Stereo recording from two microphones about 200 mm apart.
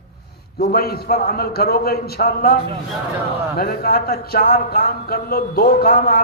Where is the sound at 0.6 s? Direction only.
50° left (ahead or behind).